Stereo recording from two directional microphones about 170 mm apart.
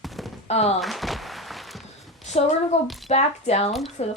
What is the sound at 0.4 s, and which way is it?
Speech, 40° left (ahead or behind).